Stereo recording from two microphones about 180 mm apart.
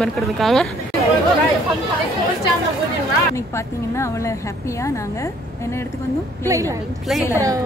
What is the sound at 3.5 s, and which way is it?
Speech, 15° left (ahead or behind).